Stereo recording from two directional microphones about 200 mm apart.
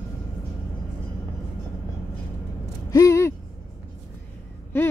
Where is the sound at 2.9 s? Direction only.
15° left (ahead or behind).